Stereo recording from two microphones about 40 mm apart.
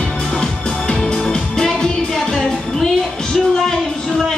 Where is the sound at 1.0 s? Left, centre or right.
Centre.